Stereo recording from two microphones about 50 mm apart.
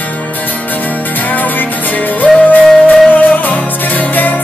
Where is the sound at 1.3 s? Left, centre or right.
Left.